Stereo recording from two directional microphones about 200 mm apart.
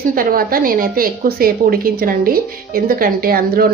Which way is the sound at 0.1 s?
45° right (ahead or behind).